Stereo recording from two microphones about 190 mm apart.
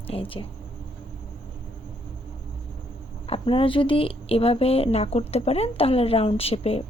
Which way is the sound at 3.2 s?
25° left (ahead or behind).